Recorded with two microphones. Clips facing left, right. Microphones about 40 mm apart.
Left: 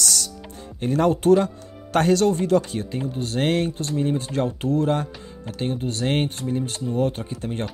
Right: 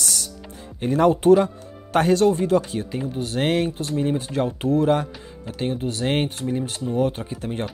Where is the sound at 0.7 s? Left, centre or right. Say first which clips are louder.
Right 2 dB; right.